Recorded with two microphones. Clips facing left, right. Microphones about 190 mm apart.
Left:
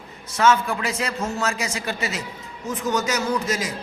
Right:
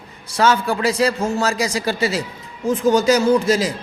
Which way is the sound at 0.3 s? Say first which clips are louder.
Right 2 dB; 35° right (ahead or behind).